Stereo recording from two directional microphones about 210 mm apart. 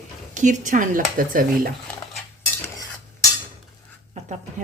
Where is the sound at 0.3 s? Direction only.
35° right (ahead or behind).